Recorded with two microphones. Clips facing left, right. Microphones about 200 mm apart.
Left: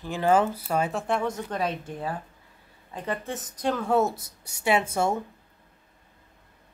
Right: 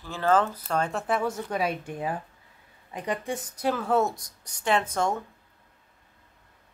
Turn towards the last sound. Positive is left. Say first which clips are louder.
# left 1 dB
turn(degrees=10)  # may be behind; listen again after turning